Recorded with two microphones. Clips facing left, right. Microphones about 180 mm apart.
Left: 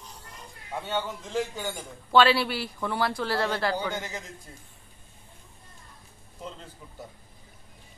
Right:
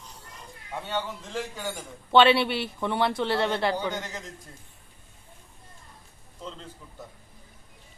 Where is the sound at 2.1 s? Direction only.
25° right (ahead or behind).